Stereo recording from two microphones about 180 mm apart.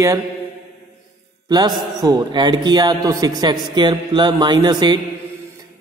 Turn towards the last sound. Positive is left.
turn(degrees=-25)  # may be behind; listen again after turning